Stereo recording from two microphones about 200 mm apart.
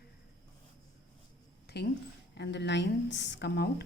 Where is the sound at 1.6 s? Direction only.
55° left (ahead or behind).